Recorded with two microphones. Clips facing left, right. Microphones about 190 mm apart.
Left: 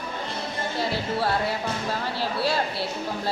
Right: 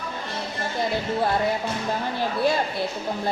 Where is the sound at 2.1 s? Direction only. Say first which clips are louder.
Right 3 dB; 20° right (ahead or behind).